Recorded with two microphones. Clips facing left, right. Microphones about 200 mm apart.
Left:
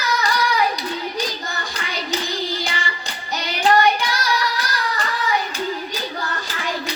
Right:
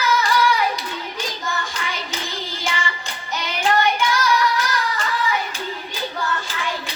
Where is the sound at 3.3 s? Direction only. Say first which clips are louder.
Left 3 dB; 35° left (ahead or behind).